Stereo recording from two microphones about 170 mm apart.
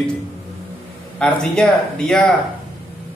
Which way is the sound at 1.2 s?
5° left (ahead or behind).